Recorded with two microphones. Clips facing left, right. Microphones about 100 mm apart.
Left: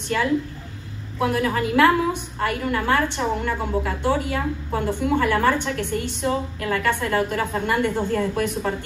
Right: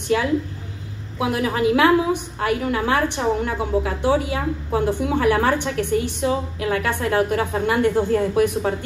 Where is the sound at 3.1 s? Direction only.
15° right (ahead or behind).